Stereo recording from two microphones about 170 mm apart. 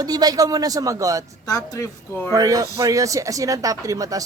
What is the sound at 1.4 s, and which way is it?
Speech, 20° left (ahead or behind).